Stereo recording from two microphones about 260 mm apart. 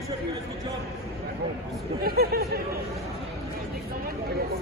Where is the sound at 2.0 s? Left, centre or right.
Right.